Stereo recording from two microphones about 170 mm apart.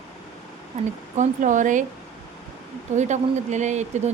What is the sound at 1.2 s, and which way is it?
Speech, 50° right (ahead or behind).